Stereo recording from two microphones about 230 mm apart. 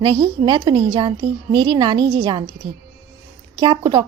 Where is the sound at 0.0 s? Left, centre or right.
Centre.